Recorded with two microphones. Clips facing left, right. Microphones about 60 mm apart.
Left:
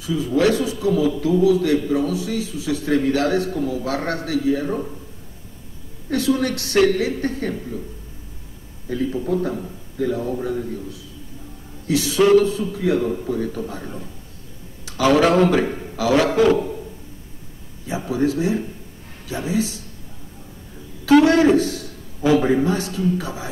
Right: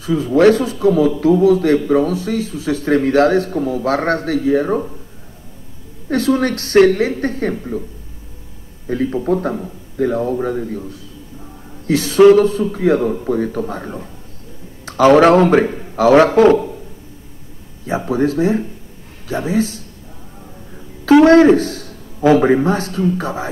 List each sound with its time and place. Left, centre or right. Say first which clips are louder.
0.0 s a man's voice: right 7 dB; right
6.0 s a man's voice: right 4 dB; right
8.8 s a man's voice: right 5 dB; right
17.8 s a man's voice: right 4 dB; right
21.1 s a man's voice: right 5 dB; right